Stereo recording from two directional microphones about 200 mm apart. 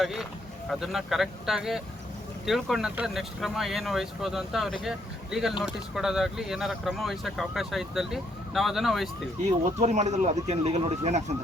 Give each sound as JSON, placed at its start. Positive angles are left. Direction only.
{"t": 0.0, "sound": "speech", "side_deg": 0}
{"t": 9.8, "sound": "speech", "side_deg": -35}